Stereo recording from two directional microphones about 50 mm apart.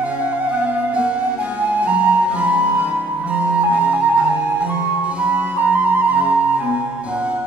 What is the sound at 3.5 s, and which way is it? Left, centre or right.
Flute, right.